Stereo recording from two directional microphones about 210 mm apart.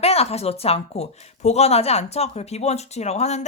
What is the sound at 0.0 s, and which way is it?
Speech, 30° left (ahead or behind).